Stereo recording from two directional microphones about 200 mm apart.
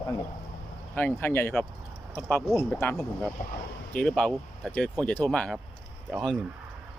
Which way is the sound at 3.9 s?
5° left (ahead or behind).